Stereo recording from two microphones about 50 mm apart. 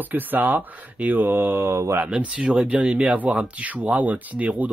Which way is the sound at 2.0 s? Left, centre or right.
Right.